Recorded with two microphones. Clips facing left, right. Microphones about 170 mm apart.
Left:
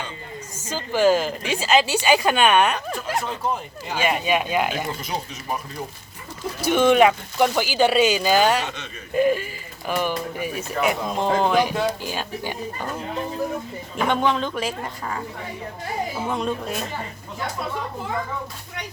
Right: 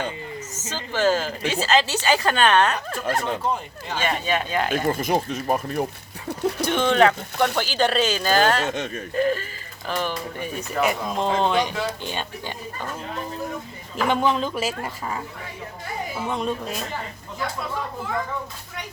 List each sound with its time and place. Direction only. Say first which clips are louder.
0.5 s speech: left 5 dB; 10° left (ahead or behind)
4.9 s speech: right 7 dB; 50° right (ahead or behind)
6.7 s speech: left 4 dB; 10° left (ahead or behind)
8.6 s speech: right 6 dB; 45° right (ahead or behind)
9.1 s speech: left 3 dB; 15° left (ahead or behind)
13.9 s speech: even; 5° right (ahead or behind)
16.3 s speech: even; centre (ahead or behind)